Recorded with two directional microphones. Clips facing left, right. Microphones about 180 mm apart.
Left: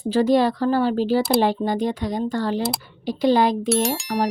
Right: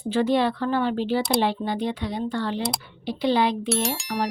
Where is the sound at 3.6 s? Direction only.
Centre (ahead or behind).